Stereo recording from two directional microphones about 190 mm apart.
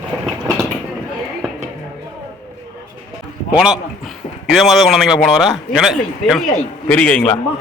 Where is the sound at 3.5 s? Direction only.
5° right (ahead or behind).